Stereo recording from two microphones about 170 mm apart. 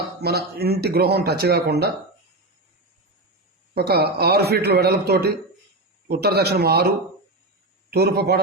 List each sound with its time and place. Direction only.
0.2 s speech: 70° right (ahead or behind)
3.8 s speech: 70° right (ahead or behind)
7.9 s speech: 70° right (ahead or behind)